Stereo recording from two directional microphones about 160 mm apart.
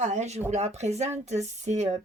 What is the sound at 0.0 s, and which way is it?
Speech, 45° right (ahead or behind).